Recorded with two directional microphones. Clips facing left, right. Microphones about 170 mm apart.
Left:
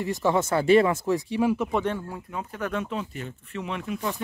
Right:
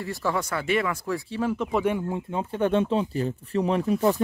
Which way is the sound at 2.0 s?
20° right (ahead or behind).